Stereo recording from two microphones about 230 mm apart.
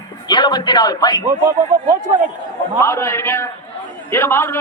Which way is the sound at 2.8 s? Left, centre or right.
Centre.